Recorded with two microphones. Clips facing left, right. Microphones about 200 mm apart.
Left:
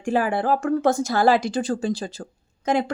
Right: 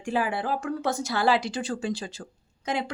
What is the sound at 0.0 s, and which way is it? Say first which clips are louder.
Speech: left 5 dB; 50° left (ahead or behind).